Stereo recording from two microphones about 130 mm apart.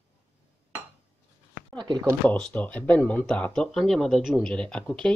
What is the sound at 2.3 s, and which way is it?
Speech, 10° left (ahead or behind).